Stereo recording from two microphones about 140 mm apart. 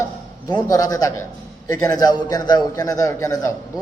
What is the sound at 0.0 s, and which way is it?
A man's voice, 25° left (ahead or behind).